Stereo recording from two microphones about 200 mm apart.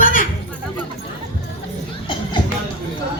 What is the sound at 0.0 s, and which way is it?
Chatter, 45° left (ahead or behind).